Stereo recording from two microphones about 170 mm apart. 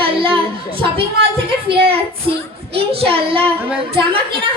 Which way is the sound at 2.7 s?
35° right (ahead or behind).